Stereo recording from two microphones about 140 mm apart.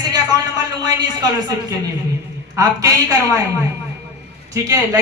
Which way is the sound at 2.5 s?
25° right (ahead or behind).